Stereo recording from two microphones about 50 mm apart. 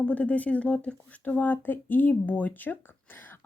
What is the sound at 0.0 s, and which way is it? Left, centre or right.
Speech, left.